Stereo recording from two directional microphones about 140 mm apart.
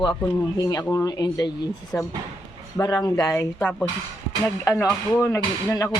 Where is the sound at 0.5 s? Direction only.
25° left (ahead or behind).